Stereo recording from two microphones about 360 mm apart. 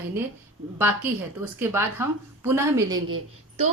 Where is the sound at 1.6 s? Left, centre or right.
Centre.